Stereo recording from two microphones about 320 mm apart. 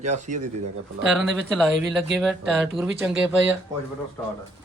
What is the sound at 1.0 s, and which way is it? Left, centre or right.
Speech, centre.